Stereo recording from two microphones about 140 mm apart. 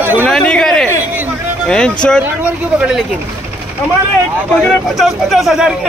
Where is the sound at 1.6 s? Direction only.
5° left (ahead or behind).